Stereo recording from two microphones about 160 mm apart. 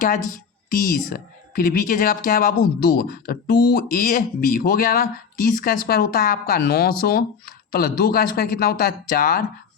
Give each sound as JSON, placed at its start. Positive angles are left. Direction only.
{"t": 0.3, "sound": "a woman's voice", "side_deg": 55}